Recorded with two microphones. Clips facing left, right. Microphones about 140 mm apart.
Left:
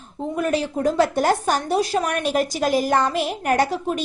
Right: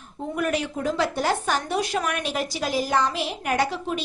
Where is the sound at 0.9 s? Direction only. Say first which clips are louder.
Left 5 dB; 45° left (ahead or behind).